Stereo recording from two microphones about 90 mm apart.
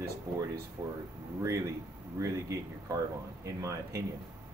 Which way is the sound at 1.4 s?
35° right (ahead or behind).